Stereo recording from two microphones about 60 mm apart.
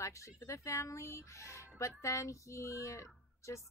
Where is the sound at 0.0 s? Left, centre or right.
Left.